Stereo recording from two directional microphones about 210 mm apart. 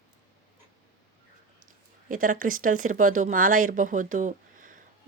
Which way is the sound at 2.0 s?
40° right (ahead or behind).